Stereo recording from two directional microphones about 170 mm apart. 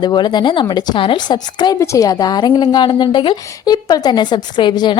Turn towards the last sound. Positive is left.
turn(degrees=25)  # may be behind; listen again after turning